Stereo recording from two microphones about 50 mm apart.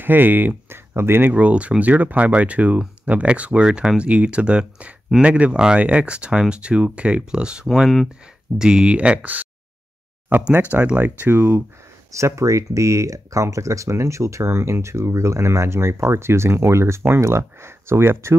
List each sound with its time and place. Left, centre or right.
0.0 s speech: right
0.7 s speech: right
1.3 s speech: right
8.9 s speech: right
10.5 s speech: right
12.1 s speech: right